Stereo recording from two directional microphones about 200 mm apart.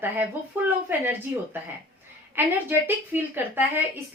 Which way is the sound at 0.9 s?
10° right (ahead or behind).